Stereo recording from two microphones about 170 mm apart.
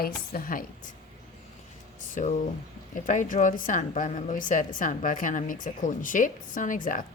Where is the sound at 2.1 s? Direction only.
45° left (ahead or behind).